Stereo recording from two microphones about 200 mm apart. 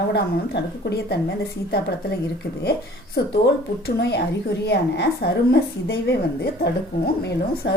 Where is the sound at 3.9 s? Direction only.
55° left (ahead or behind).